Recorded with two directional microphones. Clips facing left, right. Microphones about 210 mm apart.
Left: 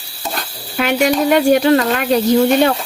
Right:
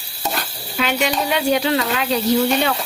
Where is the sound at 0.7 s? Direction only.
50° left (ahead or behind).